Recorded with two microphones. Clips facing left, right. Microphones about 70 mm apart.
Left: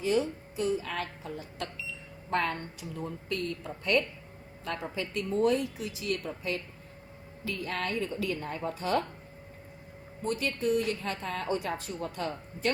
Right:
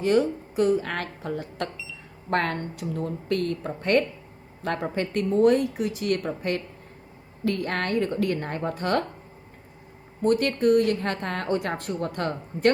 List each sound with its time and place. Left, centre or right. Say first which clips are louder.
0.0 s a woman's voice: right 6 dB; right
10.2 s a woman's voice: right 9 dB; right